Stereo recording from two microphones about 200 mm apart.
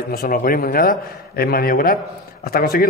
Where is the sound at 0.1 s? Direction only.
50° left (ahead or behind).